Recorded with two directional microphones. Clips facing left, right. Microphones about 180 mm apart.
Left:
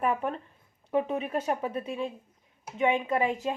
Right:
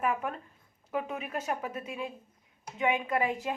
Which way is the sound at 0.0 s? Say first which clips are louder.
Left 3 dB; 30° left (ahead or behind).